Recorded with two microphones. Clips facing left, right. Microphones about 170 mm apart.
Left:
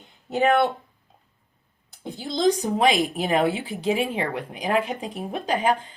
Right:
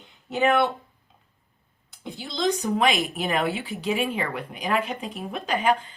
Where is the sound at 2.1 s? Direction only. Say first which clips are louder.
Left 4 dB; 45° left (ahead or behind).